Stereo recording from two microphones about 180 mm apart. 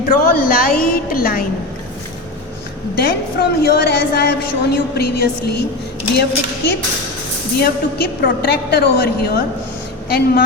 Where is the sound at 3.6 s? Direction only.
65° left (ahead or behind).